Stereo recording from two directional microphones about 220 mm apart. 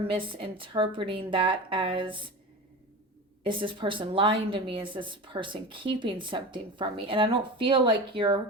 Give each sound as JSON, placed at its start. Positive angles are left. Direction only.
{"t": 0.0, "sound": "a woman's voice", "side_deg": -25}
{"t": 3.4, "sound": "a woman's voice", "side_deg": -20}